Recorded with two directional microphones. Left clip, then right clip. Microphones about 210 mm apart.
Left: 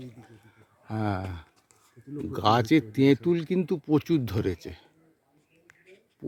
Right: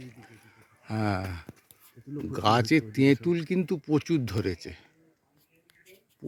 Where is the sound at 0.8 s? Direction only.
5° right (ahead or behind).